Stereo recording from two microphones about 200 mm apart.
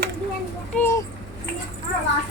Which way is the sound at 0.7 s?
10° left (ahead or behind).